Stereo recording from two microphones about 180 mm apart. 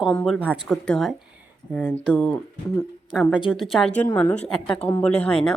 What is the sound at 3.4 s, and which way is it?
Speech, 30° left (ahead or behind).